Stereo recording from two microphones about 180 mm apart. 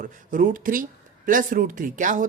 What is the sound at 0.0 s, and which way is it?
Speech, 45° right (ahead or behind).